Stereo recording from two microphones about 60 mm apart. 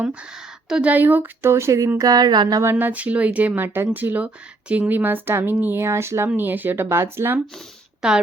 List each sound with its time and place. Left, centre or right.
0.0 s speech: centre
0.9 s speech: right
1.5 s speech: right
2.0 s speech: right
2.7 s speech: right
6.2 s speech: right
6.8 s speech: right